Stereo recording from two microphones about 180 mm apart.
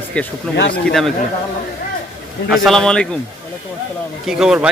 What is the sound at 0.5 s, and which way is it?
Speech, 70° left (ahead or behind).